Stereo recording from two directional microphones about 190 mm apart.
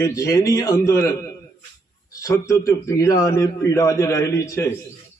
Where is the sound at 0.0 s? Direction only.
15° left (ahead or behind).